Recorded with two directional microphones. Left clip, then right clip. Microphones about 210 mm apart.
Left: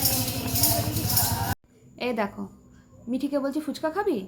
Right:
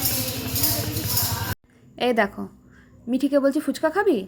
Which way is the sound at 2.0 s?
30° right (ahead or behind).